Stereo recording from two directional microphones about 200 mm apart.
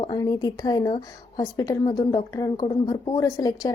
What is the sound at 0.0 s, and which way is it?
A woman's voice, 20° left (ahead or behind).